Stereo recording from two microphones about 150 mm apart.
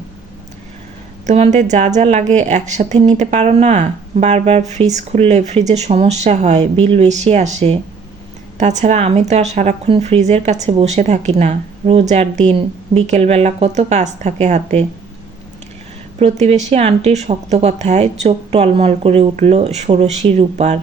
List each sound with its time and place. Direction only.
1.3 s a woman's voice: 50° right (ahead or behind)
16.1 s a woman's voice: 45° right (ahead or behind)